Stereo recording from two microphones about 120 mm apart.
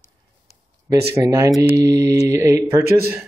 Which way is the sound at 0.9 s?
25° right (ahead or behind).